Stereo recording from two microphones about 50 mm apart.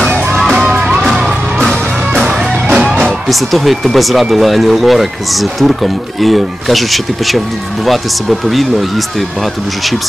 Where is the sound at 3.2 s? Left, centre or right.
Centre.